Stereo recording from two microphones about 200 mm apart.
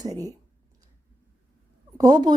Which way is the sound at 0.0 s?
20° right (ahead or behind).